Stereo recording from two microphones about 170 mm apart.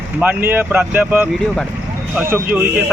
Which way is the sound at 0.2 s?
10° right (ahead or behind).